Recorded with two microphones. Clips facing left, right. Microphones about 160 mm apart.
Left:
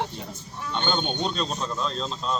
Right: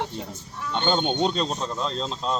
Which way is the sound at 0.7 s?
25° right (ahead or behind).